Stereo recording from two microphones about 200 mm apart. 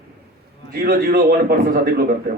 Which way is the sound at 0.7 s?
50° right (ahead or behind).